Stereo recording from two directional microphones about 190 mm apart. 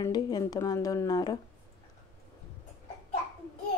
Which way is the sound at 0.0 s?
20° left (ahead or behind).